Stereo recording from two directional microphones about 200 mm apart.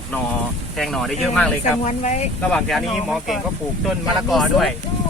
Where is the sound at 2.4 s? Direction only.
Centre (ahead or behind).